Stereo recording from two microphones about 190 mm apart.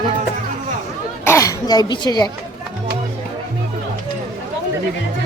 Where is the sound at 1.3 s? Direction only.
15° left (ahead or behind).